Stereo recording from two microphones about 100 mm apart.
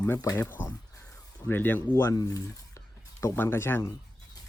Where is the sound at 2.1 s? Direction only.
40° left (ahead or behind).